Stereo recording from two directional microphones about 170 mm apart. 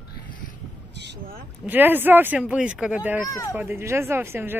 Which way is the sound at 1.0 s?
70° right (ahead or behind).